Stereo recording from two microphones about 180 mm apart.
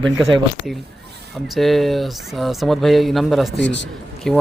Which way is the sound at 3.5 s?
75° left (ahead or behind).